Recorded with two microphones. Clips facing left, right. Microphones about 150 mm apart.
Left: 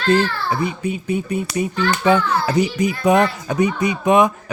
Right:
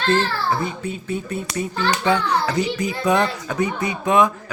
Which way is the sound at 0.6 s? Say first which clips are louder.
Left 4 dB; 15° left (ahead or behind).